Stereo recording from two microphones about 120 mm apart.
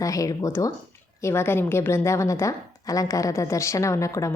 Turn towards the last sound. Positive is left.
turn(degrees=25)  # may be behind; listen again after turning